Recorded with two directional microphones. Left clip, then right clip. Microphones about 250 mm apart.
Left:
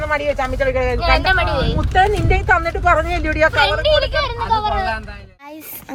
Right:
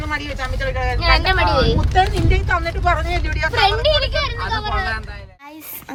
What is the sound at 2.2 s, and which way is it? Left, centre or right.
Speech, left.